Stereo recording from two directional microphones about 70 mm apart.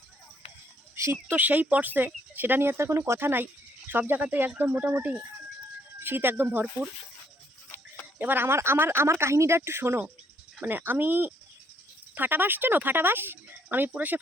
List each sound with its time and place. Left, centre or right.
1.0 s speech: right
8.2 s speech: right
10.6 s speech: right